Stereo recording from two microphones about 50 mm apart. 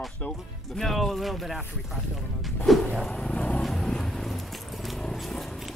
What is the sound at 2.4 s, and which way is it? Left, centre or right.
Music, centre.